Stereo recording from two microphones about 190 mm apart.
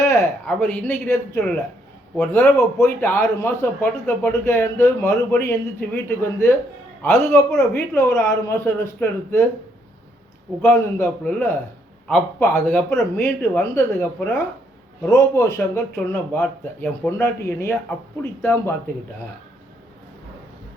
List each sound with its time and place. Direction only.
0.0 s a sound: 15° left (ahead or behind)
0.4 s a man's voice: 5° left (ahead or behind)
10.6 s a man's voice: 10° left (ahead or behind)